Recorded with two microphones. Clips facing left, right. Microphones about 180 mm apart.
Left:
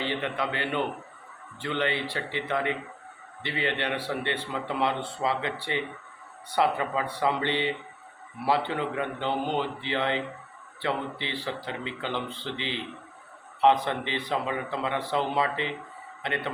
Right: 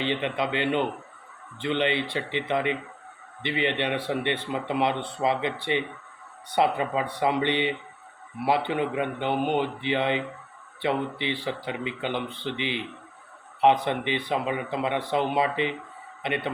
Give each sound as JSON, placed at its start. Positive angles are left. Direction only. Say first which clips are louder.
{"t": 0.0, "sound": "speech", "louder": "right 3 dB", "side_deg": -20}
{"t": 6.6, "sound": "speech", "louder": "right 2 dB", "side_deg": -20}
{"t": 13.8, "sound": "a man's voice", "louder": "right 3 dB", "side_deg": -20}